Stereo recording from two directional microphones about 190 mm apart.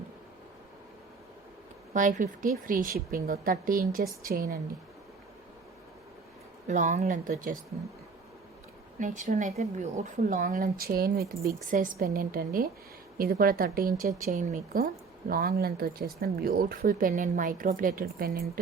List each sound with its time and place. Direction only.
1.9 s a woman's voice: 40° right (ahead or behind)
6.7 s speech: 40° right (ahead or behind)
9.0 s a woman's voice: 40° right (ahead or behind)